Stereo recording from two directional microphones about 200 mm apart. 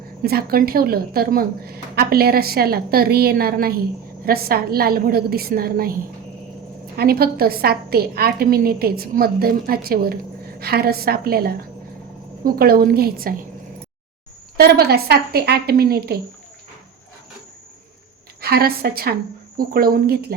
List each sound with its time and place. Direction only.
0.2 s a woman's voice: 50° right (ahead or behind)
6.9 s a woman's voice: 50° right (ahead or behind)
14.5 s a woman's voice: 50° right (ahead or behind)
18.3 s a woman's voice: 50° right (ahead or behind)